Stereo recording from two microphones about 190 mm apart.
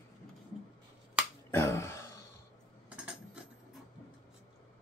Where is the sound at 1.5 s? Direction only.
15° left (ahead or behind).